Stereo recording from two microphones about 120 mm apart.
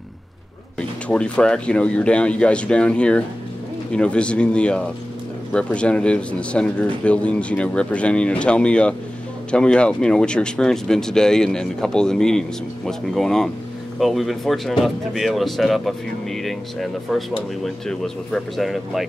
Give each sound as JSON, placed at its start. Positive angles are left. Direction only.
{"t": 0.7, "sound": "a man's voice", "side_deg": 10}